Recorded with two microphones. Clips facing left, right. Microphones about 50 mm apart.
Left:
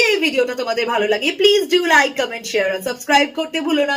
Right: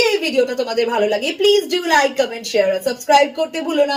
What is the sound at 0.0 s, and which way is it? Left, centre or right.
A woman's voice, left.